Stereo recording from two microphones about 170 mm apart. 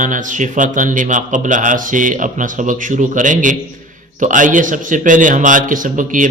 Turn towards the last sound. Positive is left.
turn(degrees=-50)  # may be behind; listen again after turning